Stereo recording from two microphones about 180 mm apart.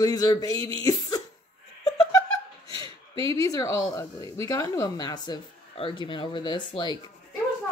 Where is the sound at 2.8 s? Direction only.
30° right (ahead or behind).